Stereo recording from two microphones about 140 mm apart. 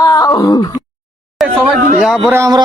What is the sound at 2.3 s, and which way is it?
Speech, 20° right (ahead or behind).